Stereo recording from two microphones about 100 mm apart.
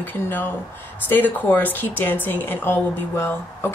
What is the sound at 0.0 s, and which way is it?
A woman's voice, 20° left (ahead or behind).